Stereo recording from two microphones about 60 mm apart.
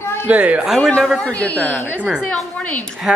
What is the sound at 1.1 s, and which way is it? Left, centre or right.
Speech, left.